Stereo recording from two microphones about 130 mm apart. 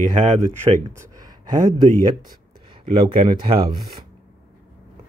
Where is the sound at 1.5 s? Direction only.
35° right (ahead or behind).